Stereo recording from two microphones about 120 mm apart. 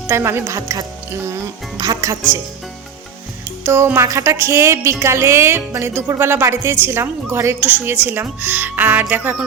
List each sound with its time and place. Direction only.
0.1 s music: 20° right (ahead or behind)
3.6 s music: 20° right (ahead or behind)